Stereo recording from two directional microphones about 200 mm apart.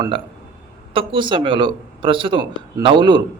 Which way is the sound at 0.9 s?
25° right (ahead or behind).